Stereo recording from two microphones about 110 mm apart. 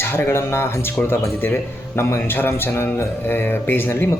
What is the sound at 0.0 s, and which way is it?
A man's voice, 20° left (ahead or behind).